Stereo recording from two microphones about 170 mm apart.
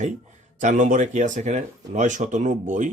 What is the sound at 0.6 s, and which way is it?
Speech, 50° right (ahead or behind).